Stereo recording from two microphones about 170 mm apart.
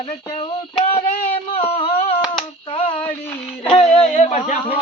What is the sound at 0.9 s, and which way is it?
Speech, 15° left (ahead or behind).